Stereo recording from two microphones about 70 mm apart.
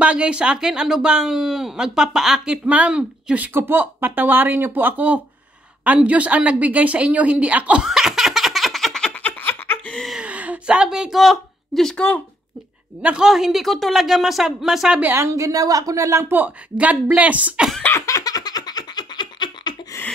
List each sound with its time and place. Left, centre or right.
0.0 s a woman's voice: centre
7.8 s a sound: centre
9.1 s a sound: left
10.2 s speech: centre
13.2 s speech: centre
15.1 s a woman's voice: right
15.4 s speech: right
16.3 s a woman's voice: right
18.0 s a sound: left